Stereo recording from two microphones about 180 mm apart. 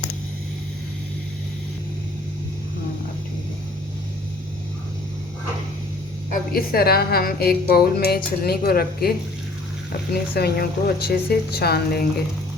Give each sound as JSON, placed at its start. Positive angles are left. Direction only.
{"t": 6.5, "sound": "speech", "side_deg": 55}
{"t": 10.3, "sound": "speech", "side_deg": 60}